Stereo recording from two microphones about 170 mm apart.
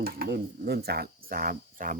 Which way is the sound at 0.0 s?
65° right (ahead or behind).